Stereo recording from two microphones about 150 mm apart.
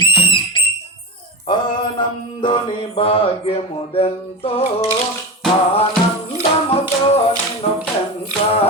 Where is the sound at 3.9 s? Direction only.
40° left (ahead or behind).